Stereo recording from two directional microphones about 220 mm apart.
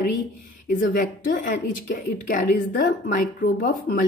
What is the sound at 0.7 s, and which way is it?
A woman's voice, 40° left (ahead or behind).